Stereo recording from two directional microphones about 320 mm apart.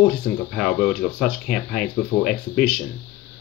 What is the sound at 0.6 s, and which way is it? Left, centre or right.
Speech, centre.